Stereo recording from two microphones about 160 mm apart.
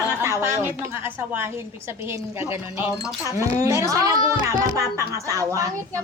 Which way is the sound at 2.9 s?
20° left (ahead or behind).